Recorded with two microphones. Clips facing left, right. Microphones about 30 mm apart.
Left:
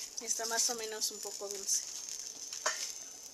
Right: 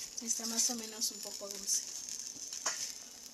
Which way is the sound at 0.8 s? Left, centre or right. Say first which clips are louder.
Left 3 dB; left.